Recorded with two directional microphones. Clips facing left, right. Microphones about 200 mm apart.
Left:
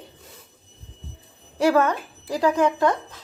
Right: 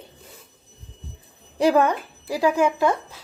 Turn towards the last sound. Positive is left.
turn(degrees=-10)  # may be behind; listen again after turning